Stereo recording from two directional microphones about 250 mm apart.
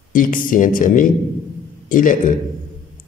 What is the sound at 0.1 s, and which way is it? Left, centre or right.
Speech, left.